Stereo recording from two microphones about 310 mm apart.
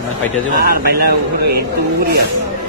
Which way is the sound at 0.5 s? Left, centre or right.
Right.